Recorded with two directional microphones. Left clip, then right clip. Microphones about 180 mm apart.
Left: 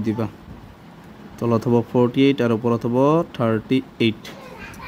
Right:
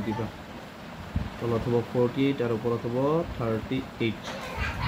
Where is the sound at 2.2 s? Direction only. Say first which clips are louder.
Left 9 dB; 85° left.